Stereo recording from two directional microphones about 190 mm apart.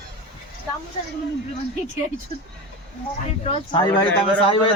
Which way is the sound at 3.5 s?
25° left (ahead or behind).